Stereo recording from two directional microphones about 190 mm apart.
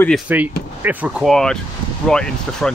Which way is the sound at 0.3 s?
10° right (ahead or behind).